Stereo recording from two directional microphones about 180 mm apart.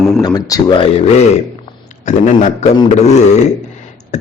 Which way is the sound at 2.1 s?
40° left (ahead or behind).